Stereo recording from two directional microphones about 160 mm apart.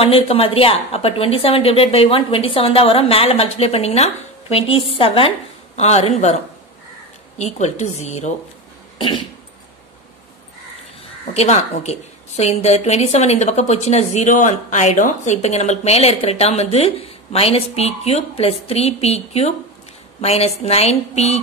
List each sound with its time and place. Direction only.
0.0 s a woman's voice: 35° left (ahead or behind)
8.9 s cough: 30° left (ahead or behind)
11.3 s a woman's voice: 45° left (ahead or behind)